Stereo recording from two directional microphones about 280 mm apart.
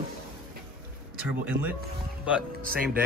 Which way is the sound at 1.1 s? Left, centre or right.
Centre.